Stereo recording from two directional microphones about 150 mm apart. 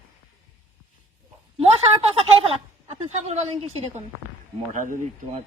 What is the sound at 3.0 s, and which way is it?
Speech, 50° right (ahead or behind).